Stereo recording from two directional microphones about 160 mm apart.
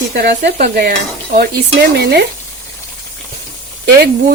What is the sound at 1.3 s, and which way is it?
Speech, 90° right.